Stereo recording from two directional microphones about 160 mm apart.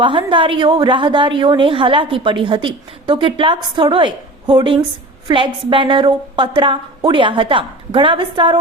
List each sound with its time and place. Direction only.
0.0 s a woman's voice: 30° right (ahead or behind)